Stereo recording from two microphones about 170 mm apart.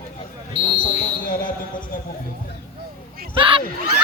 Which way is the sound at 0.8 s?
55° left (ahead or behind).